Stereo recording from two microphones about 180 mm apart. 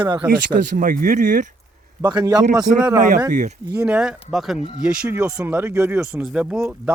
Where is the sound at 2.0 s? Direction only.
20° right (ahead or behind).